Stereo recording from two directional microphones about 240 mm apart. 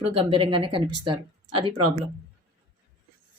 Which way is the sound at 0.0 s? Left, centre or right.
Right.